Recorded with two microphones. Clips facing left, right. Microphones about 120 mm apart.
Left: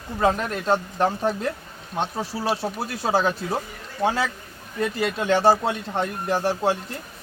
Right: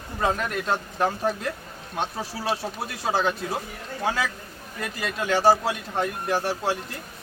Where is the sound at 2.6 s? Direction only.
30° left (ahead or behind).